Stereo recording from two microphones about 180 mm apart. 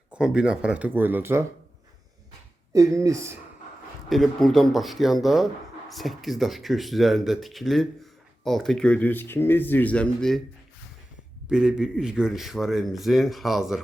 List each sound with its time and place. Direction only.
0.1 s speech: 5° right (ahead or behind)
2.7 s speech: 20° right (ahead or behind)
4.1 s speech: centre (ahead or behind)
11.4 s speech: 5° right (ahead or behind)